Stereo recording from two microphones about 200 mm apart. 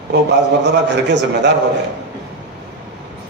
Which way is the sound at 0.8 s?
60° right (ahead or behind).